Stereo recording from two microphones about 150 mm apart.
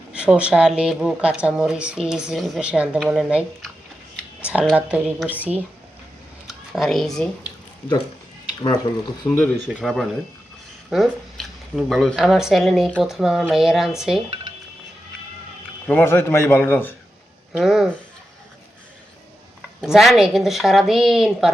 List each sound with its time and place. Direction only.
0.1 s speech: 5° right (ahead or behind)
4.4 s a sound: 10° right (ahead or behind)
4.7 s a woman's voice: 5° right (ahead or behind)
9.2 s a man's voice: 15° left (ahead or behind)
9.6 s speech: centre (ahead or behind)
15.9 s a man's voice: 15° left (ahead or behind)
17.5 s speech: 5° right (ahead or behind)
19.8 s speech: centre (ahead or behind)